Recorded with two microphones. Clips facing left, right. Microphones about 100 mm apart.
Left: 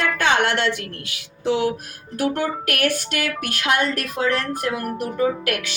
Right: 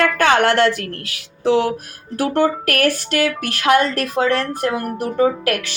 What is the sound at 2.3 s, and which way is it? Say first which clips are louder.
Speech: right 7 dB; 35° right (ahead or behind).